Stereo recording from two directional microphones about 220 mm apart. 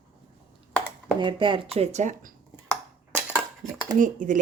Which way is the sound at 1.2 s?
20° right (ahead or behind).